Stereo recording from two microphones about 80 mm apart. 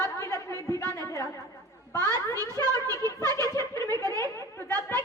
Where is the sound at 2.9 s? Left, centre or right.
Left.